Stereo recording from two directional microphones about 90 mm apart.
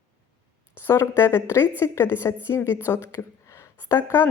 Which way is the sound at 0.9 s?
30° left (ahead or behind).